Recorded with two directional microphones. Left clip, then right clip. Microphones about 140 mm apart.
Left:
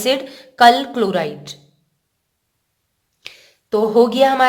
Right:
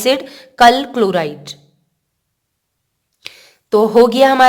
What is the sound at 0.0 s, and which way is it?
A woman's voice, 50° right (ahead or behind).